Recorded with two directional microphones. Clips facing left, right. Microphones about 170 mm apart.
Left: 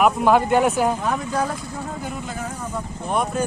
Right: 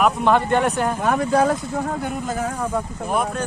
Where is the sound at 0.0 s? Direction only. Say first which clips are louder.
Left 1 dB; 5° left (ahead or behind).